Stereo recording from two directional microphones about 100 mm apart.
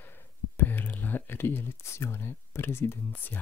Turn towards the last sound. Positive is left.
turn(degrees=20)  # may be behind; listen again after turning